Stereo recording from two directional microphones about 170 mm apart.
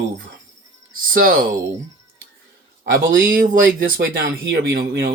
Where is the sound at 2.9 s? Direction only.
60° right (ahead or behind).